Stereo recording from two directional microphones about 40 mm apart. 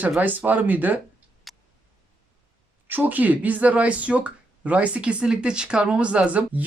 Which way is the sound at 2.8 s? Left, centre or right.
Right.